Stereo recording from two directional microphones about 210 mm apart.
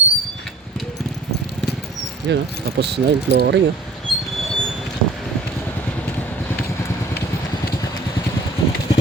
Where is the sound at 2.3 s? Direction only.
55° right (ahead or behind).